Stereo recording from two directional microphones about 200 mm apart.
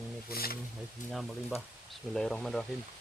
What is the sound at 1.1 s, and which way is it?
Speech, centre (ahead or behind).